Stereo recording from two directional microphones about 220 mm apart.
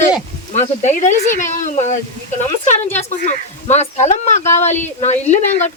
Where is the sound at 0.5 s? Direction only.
30° left (ahead or behind).